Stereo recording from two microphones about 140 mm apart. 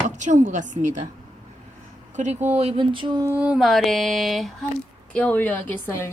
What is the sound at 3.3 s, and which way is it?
Mantra, 10° right (ahead or behind).